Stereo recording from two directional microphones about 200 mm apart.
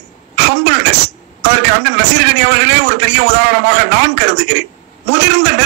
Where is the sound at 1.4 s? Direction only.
60° right (ahead or behind).